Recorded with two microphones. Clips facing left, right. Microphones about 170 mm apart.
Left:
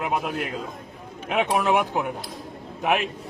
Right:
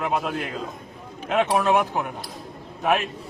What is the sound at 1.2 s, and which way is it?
Speech, 15° left (ahead or behind).